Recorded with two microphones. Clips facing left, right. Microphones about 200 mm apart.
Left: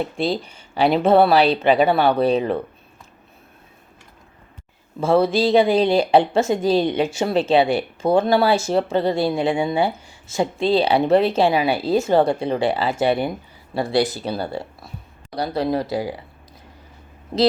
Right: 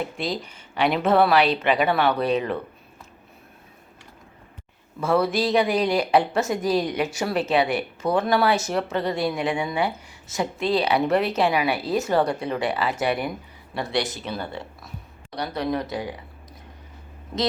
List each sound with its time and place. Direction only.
0.0 s speech: 30° left (ahead or behind)
4.9 s speech: 25° left (ahead or behind)